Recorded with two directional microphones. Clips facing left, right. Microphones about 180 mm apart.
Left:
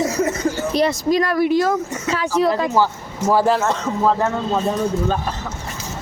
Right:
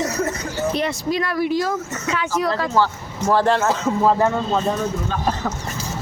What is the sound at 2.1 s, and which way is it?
Speech, 30° left (ahead or behind).